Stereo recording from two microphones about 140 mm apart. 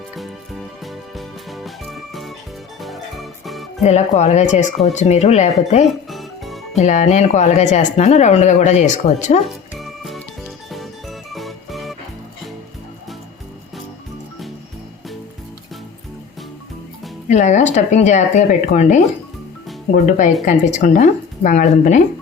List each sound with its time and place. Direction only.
1.1 s music: centre (ahead or behind)
3.8 s speech: 55° left (ahead or behind)
6.1 s music: centre (ahead or behind)
6.7 s speech: 55° left (ahead or behind)
9.4 s music: centre (ahead or behind)
11.3 s music: centre (ahead or behind)
17.2 s speech: 60° left (ahead or behind)